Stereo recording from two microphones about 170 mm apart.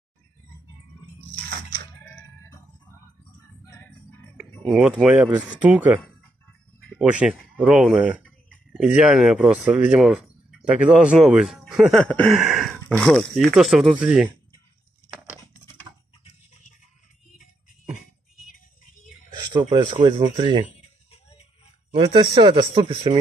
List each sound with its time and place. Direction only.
4.4 s speech: 5° right (ahead or behind)
19.3 s a sound: 25° right (ahead or behind)
19.7 s speech: 30° right (ahead or behind)
21.9 s speech: 30° right (ahead or behind)